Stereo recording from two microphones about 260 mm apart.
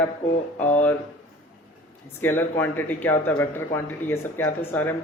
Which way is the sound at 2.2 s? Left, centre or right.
Centre.